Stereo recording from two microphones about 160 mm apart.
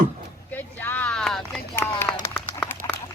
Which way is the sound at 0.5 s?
10° left (ahead or behind).